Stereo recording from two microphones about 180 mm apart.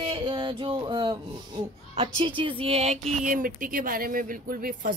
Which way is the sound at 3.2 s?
50° right (ahead or behind).